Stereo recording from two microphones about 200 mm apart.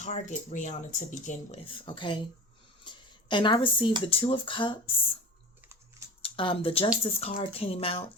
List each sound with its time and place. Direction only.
0.0 s speech: 35° left (ahead or behind)
1.6 s speech: 25° left (ahead or behind)
6.2 s speech: 25° left (ahead or behind)